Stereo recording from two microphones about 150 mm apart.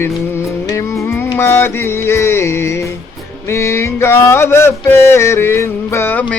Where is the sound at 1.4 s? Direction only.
15° left (ahead or behind).